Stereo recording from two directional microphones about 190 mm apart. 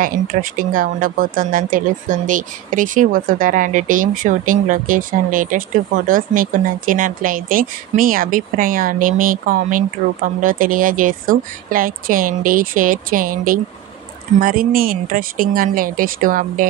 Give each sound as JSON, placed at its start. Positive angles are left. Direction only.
{"t": 0.0, "sound": "speech", "side_deg": -45}